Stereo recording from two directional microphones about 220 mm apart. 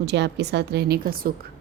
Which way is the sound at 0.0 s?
50° right (ahead or behind).